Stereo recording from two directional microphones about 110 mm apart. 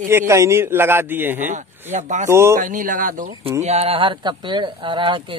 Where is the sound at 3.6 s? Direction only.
70° right (ahead or behind); by 5.4 s 50° right (ahead or behind).